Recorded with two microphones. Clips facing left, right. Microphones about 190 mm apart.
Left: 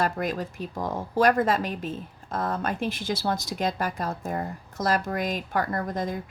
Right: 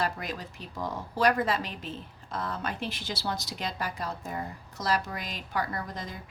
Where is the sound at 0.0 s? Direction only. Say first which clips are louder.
Left 6 dB; 50° left (ahead or behind).